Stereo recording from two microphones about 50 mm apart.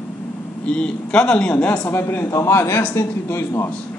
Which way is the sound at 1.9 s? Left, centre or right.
Left.